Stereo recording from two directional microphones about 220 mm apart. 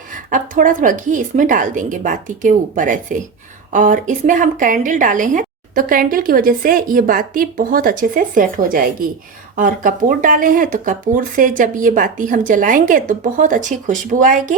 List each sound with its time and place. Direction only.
0.3 s a woman's voice: 35° right (ahead or behind)